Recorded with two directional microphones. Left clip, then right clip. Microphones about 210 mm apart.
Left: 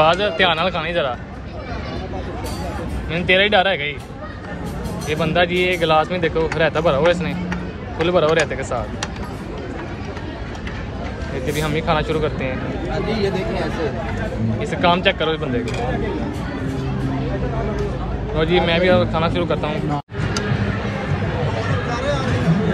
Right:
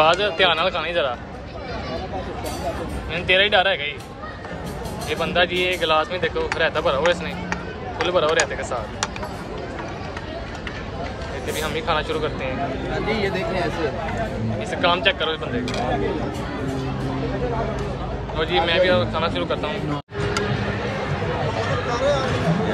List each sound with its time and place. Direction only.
0.0 s speech: 15° right (ahead or behind)
3.1 s speech: 10° right (ahead or behind)
5.0 s speech: 10° right (ahead or behind)
11.5 s speech: 5° right (ahead or behind)
14.6 s speech: 10° right (ahead or behind)
18.3 s speech: 5° right (ahead or behind)
21.8 s a sound: 35° right (ahead or behind)